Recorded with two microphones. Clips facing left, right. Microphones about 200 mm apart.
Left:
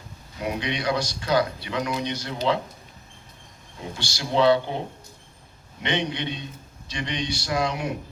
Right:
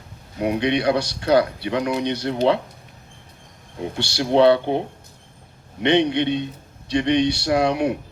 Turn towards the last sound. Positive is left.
turn(degrees=-65)  # may be behind; listen again after turning